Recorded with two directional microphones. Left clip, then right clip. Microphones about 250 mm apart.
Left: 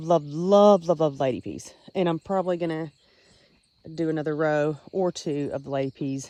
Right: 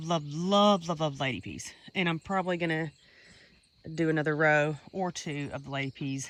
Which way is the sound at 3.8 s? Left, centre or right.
Centre.